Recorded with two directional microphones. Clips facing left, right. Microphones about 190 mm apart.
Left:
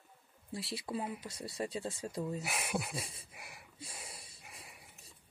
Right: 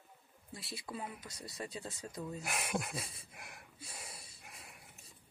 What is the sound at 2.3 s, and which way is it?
Speech, centre (ahead or behind).